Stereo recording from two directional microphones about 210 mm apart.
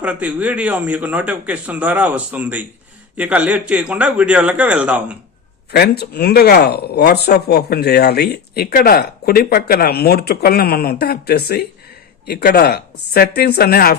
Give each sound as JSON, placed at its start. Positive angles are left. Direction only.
{"t": 0.0, "sound": "a man's voice", "side_deg": -5}
{"t": 5.7, "sound": "speech", "side_deg": 50}